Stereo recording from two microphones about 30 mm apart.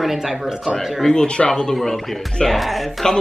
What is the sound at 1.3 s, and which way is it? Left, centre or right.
Speech, left.